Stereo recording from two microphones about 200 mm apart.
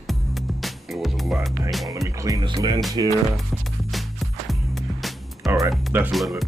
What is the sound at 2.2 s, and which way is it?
Speech, 20° right (ahead or behind).